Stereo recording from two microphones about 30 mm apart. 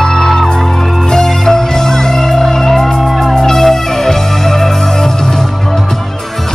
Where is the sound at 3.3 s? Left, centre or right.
Centre.